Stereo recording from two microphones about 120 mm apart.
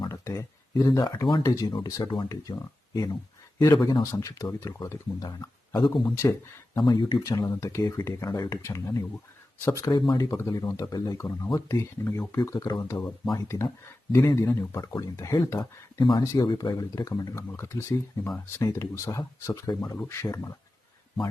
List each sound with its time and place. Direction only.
0.1 s speech: 25° left (ahead or behind)
4.0 s speech: 25° left (ahead or behind)
7.2 s speech: 30° left (ahead or behind)
16.0 s speech: 40° left (ahead or behind)
16.2 s speech: 30° left (ahead or behind)
16.5 s speech: 40° left (ahead or behind)
16.7 s speech: 30° left (ahead or behind)